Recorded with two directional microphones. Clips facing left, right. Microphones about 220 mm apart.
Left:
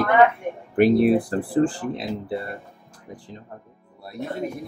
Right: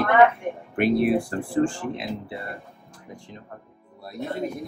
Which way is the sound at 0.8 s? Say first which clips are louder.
Left 4 dB; 35° left (ahead or behind).